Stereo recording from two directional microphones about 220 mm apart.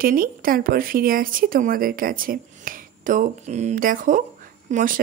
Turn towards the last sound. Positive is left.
turn(degrees=-35)  # may be behind; listen again after turning